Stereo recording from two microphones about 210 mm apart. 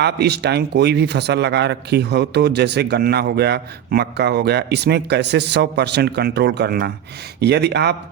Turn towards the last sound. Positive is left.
turn(degrees=-50)  # may be behind; listen again after turning